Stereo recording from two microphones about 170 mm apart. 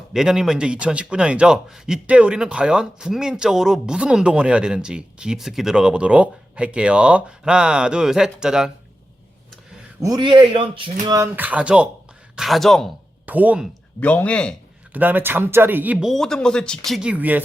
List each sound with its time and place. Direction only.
0.1 s a man's voice: 5° right (ahead or behind)
10.0 s a man's voice: 25° right (ahead or behind)
11.0 s a man's voice: 20° right (ahead or behind); by 12.9 s centre (ahead or behind)
13.2 s speech: 10° right (ahead or behind)
14.0 s speech: 10° left (ahead or behind)
14.9 s speech: 10° right (ahead or behind)